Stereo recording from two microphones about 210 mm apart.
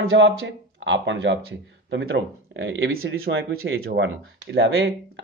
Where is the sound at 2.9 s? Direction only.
80° right.